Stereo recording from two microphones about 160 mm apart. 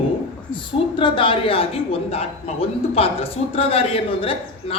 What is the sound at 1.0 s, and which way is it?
A woman's voice, 30° left (ahead or behind).